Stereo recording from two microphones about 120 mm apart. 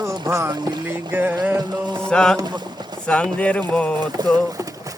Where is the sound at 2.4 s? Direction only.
35° right (ahead or behind).